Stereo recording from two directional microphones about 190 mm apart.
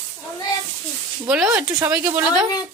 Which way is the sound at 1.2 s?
10° right (ahead or behind).